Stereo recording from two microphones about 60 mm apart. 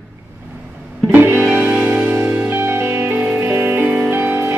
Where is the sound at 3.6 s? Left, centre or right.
Right.